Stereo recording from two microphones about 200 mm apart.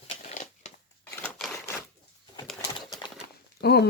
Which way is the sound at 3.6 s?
55° left (ahead or behind).